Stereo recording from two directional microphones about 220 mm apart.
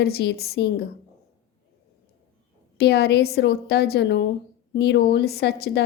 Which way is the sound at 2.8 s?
45° left (ahead or behind).